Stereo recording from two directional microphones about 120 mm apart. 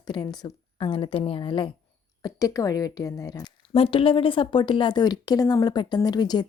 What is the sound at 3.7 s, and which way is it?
Speech, 50° left (ahead or behind).